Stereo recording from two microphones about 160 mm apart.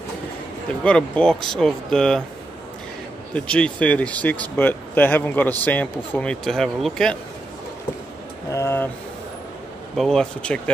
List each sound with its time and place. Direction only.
0.8 s speech: 5° left (ahead or behind)
3.3 s speech: 5° left (ahead or behind)
8.5 s speech: 15° left (ahead or behind)
9.9 s speech: 5° left (ahead or behind)